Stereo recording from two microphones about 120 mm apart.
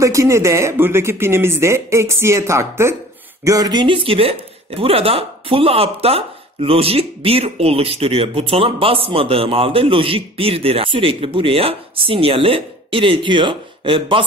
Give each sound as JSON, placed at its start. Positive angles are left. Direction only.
{"t": 0.0, "sound": "speech", "side_deg": -25}